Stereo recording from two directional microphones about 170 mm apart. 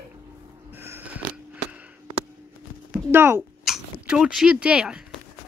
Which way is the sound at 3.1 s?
15° right (ahead or behind).